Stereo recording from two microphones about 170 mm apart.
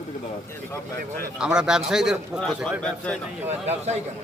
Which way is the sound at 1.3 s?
5° right (ahead or behind).